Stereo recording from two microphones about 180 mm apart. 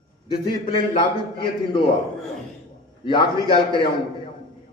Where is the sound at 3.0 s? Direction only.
25° left (ahead or behind).